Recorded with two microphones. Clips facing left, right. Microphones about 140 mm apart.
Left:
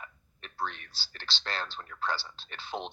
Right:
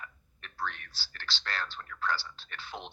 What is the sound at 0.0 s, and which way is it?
Speech, 25° left (ahead or behind).